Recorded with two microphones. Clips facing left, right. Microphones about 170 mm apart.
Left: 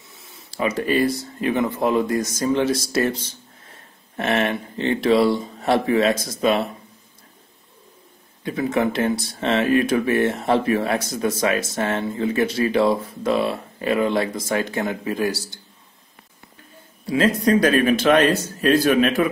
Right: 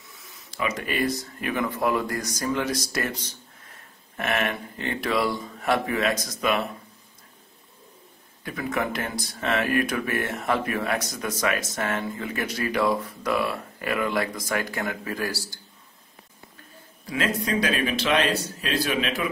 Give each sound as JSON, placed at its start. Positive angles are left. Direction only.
{"t": 0.1, "sound": "speech", "side_deg": 30}
{"t": 8.5, "sound": "speech", "side_deg": 25}
{"t": 17.0, "sound": "a man's voice", "side_deg": 30}
{"t": 17.5, "sound": "a man's voice", "side_deg": 45}